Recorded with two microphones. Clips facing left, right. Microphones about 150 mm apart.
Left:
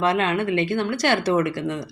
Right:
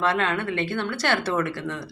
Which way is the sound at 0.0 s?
15° left (ahead or behind).